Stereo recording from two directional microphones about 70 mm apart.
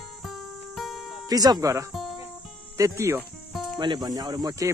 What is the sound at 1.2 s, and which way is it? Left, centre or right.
Speech, right.